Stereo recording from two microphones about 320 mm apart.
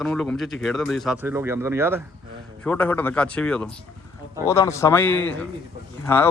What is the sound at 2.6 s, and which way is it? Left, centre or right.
A man's voice, centre.